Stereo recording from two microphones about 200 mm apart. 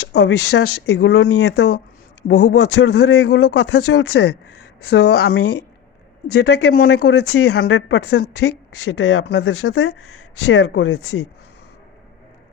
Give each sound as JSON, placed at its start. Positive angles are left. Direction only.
{"t": 0.1, "sound": "speech", "side_deg": 60}
{"t": 6.3, "sound": "speech", "side_deg": 55}